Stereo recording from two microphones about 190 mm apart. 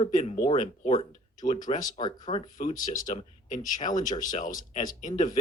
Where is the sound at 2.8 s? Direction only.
45° left (ahead or behind).